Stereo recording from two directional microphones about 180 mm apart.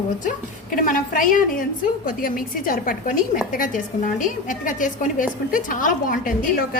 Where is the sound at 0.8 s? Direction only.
50° left (ahead or behind).